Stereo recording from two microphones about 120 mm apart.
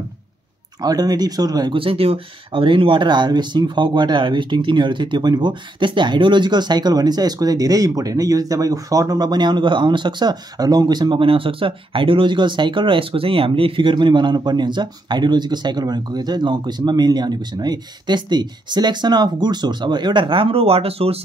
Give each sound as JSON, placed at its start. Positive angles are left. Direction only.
{"t": 0.7, "sound": "speech", "side_deg": -35}
{"t": 1.8, "sound": "speech", "side_deg": -50}